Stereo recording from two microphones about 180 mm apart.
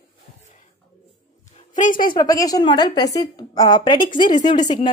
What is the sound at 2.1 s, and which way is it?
A woman's voice, 20° left (ahead or behind).